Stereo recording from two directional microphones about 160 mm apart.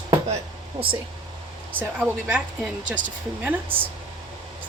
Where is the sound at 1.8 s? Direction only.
10° right (ahead or behind).